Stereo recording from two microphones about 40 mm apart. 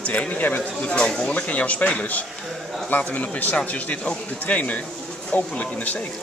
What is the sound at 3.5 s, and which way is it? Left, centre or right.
Speech, left.